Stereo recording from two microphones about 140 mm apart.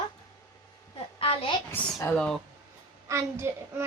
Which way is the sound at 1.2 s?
40° left (ahead or behind).